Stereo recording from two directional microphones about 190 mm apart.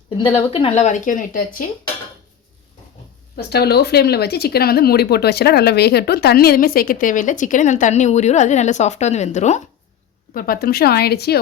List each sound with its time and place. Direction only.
0.5 s speech: 30° left (ahead or behind)
3.3 s speech: 55° left (ahead or behind); by 9.6 s 40° left (ahead or behind)
10.3 s speech: 50° left (ahead or behind)